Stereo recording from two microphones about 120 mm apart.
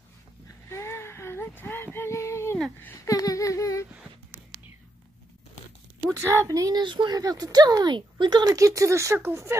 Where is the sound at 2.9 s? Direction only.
30° left (ahead or behind).